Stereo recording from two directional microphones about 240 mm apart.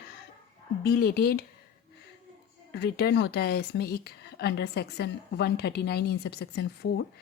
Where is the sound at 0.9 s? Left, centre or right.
Left.